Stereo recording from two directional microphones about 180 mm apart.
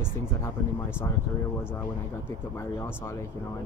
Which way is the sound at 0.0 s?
15° left (ahead or behind).